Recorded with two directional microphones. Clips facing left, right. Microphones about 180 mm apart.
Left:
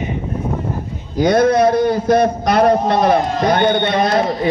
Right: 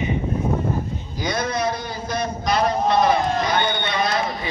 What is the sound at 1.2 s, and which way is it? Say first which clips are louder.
A man's voice: left 12 dB; 55° left (ahead or behind).